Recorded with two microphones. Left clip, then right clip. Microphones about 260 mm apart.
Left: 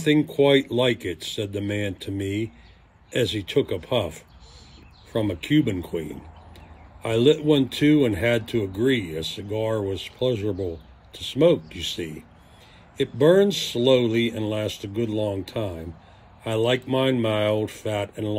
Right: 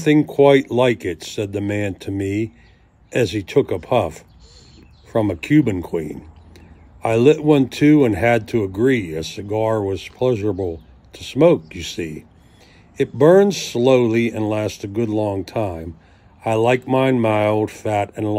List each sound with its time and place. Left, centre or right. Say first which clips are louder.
0.0 s speech: right 6 dB; centre
7.0 s speech: right 5 dB; centre